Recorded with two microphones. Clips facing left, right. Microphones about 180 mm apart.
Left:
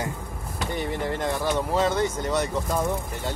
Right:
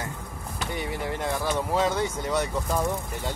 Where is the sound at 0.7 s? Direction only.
5° right (ahead or behind).